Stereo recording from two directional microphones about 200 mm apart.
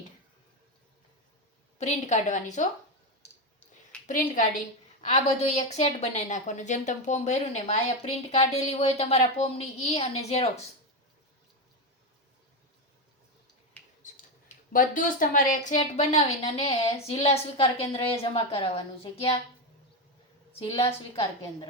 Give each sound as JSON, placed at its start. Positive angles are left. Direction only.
{"t": 1.8, "sound": "a woman's voice", "side_deg": 35}
{"t": 4.0, "sound": "a woman's voice", "side_deg": 40}
{"t": 14.0, "sound": "a sound", "side_deg": 40}
{"t": 14.7, "sound": "a woman's voice", "side_deg": 45}
{"t": 20.6, "sound": "a woman's voice", "side_deg": 30}